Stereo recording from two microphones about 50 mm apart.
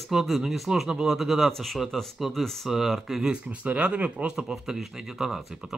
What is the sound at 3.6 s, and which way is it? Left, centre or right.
Speech, right.